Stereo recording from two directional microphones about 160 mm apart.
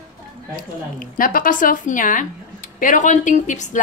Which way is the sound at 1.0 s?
60° left (ahead or behind).